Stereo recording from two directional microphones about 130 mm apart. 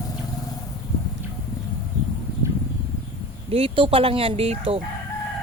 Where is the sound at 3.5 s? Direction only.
45° right (ahead or behind).